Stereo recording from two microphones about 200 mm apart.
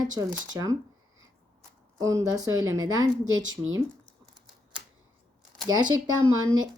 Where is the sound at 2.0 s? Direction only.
15° right (ahead or behind).